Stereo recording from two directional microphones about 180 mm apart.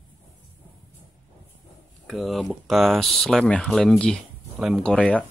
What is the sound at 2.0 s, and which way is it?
Speech, centre (ahead or behind).